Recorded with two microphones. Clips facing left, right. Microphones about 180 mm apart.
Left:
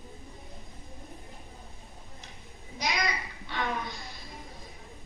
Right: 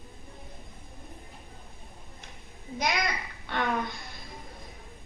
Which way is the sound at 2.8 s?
55° right (ahead or behind).